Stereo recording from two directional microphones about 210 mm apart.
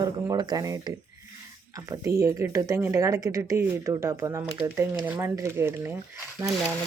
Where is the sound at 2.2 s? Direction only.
15° right (ahead or behind).